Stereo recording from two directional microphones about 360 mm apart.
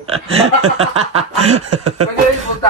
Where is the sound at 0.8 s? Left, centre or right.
Centre.